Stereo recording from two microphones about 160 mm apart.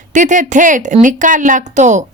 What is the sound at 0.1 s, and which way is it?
A woman's voice, 50° right (ahead or behind).